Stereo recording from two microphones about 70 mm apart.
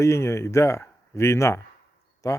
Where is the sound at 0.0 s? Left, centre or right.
Left.